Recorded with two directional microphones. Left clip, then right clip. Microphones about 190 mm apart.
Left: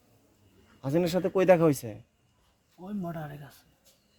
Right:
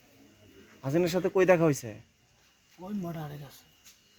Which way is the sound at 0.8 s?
60° left (ahead or behind).